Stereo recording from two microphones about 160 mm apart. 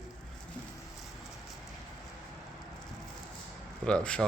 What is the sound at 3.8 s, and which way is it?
Speech, 5° left (ahead or behind).